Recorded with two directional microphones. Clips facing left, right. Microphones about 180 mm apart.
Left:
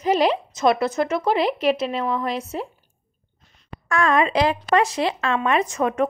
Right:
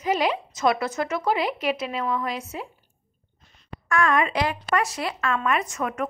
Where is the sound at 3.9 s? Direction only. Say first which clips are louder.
Left 3 dB; 30° left (ahead or behind).